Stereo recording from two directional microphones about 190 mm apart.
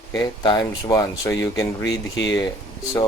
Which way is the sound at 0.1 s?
20° left (ahead or behind).